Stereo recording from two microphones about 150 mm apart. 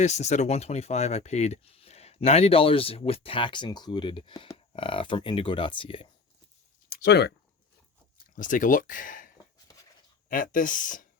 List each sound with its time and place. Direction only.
0.0 s speech: 50° left (ahead or behind); by 6.1 s 35° left (ahead or behind)
6.9 s speech: 90° left
8.4 s speech: 60° left (ahead or behind)